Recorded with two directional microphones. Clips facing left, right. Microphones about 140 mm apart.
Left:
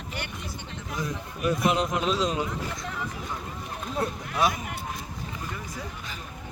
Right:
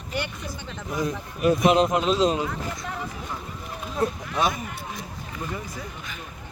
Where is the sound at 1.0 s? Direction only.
20° right (ahead or behind).